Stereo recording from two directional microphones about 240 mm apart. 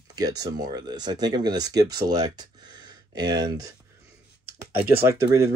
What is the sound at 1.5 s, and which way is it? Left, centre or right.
Speech, right.